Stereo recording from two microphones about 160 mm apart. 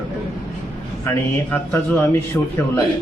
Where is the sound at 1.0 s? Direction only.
15° left (ahead or behind).